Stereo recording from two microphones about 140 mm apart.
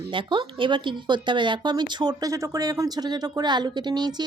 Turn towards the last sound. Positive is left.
turn(degrees=-30)  # may be behind; listen again after turning